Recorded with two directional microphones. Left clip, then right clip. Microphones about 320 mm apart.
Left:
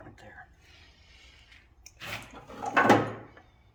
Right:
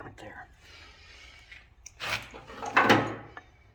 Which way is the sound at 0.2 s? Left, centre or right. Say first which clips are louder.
Right 4 dB; centre.